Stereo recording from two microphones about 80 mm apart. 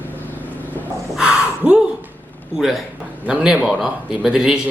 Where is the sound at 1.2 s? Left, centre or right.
Centre.